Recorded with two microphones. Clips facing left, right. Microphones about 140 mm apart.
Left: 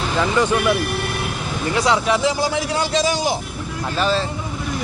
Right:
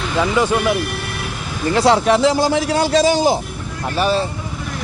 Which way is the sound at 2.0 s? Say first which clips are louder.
Right 5 dB; 45° right (ahead or behind).